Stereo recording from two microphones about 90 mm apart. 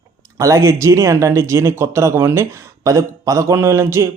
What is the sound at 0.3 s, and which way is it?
A man's voice, 40° right (ahead or behind).